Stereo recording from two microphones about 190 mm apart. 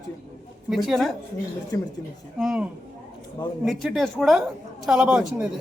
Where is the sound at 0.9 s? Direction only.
Centre (ahead or behind).